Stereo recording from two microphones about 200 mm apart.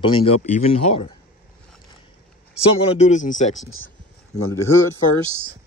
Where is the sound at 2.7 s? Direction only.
30° left (ahead or behind).